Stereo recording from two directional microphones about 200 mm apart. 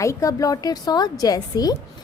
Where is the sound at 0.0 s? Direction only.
15° left (ahead or behind).